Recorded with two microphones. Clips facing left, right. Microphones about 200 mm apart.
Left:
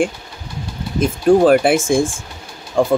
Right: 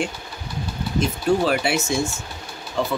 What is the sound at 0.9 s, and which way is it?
Speech, 50° left (ahead or behind).